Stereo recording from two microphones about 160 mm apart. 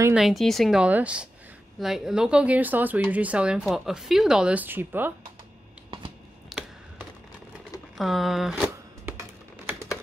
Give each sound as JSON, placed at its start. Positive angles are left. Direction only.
{"t": 0.1, "sound": "speech", "side_deg": 0}
{"t": 6.5, "sound": "computer keyboard", "side_deg": 0}
{"t": 8.0, "sound": "a sound", "side_deg": 0}